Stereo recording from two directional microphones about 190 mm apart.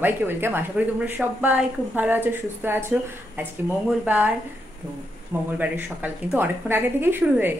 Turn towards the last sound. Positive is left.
turn(degrees=-10)  # may be behind; listen again after turning